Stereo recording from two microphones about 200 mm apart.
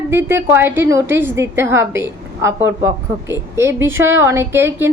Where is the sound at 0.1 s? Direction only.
10° right (ahead or behind).